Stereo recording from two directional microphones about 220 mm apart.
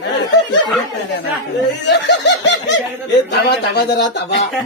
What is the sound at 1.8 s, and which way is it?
Snicker, 55° left (ahead or behind).